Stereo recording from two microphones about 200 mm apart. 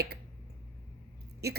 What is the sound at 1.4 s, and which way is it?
Speech, 55° right (ahead or behind).